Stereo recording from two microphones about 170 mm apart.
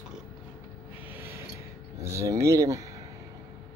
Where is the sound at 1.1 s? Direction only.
15° right (ahead or behind).